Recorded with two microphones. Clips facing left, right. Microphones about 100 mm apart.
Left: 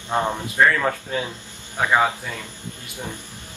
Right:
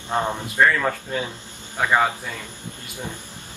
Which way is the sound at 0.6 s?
5° left (ahead or behind).